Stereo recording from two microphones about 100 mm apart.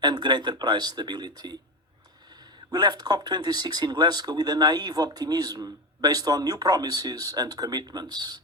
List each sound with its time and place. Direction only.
0.0 s speech: 45° right (ahead or behind)
2.7 s speech: 45° right (ahead or behind)